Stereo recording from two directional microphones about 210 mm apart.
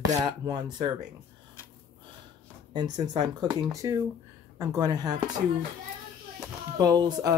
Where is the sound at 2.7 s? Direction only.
20° right (ahead or behind).